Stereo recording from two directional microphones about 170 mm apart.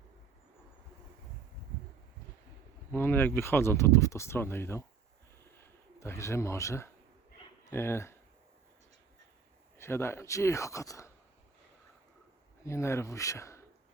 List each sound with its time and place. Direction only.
2.9 s speech: 15° left (ahead or behind)
5.5 s bird: 15° left (ahead or behind)
7.7 s speech: 15° left (ahead or behind)
9.7 s speech: 15° left (ahead or behind)
12.6 s speech: 15° left (ahead or behind)